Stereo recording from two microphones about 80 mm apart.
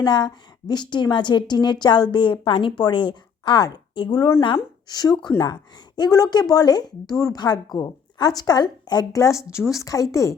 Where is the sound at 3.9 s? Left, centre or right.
Left.